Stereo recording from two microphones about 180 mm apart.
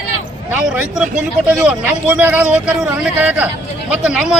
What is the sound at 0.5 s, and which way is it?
A man's voice, 5° right (ahead or behind).